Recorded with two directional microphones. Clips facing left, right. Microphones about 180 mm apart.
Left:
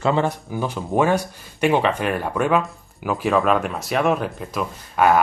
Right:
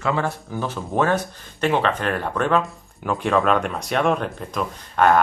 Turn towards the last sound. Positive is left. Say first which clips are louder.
# even
turn(degrees=5)  # may be behind; listen again after turning